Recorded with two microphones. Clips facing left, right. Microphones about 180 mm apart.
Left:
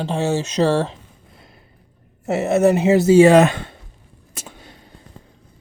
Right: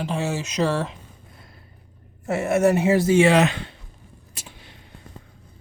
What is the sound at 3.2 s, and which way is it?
Speech, 45° left (ahead or behind).